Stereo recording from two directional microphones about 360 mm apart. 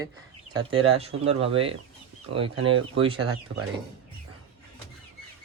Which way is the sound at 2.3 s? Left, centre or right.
Right.